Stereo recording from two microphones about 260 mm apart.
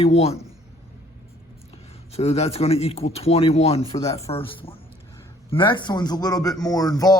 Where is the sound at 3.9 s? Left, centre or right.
Centre.